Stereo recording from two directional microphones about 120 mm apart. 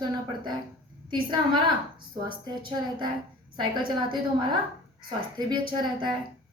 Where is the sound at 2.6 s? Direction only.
40° right (ahead or behind).